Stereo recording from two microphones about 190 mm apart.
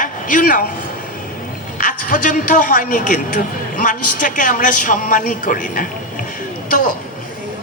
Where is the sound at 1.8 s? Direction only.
45° left (ahead or behind).